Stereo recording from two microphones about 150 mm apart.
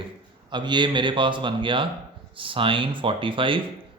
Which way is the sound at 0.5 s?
30° right (ahead or behind).